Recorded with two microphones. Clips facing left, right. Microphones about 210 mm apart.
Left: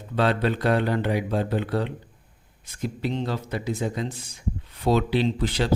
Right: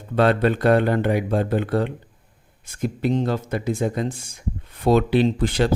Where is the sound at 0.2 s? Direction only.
55° right (ahead or behind).